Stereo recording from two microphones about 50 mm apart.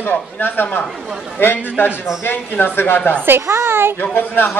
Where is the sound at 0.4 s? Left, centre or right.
Left.